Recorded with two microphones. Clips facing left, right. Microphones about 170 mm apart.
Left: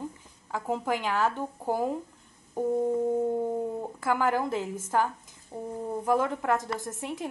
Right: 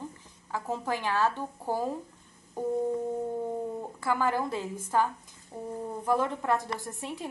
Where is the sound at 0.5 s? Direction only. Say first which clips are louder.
Left 3 dB; 15° left (ahead or behind).